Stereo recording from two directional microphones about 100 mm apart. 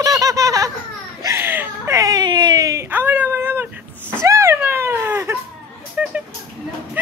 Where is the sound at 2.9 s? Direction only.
20° right (ahead or behind).